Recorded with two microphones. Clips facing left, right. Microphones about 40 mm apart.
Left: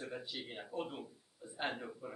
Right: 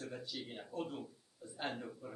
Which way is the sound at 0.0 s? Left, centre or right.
Left.